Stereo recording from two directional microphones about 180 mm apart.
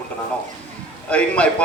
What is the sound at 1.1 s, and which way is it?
Speech, 5° left (ahead or behind).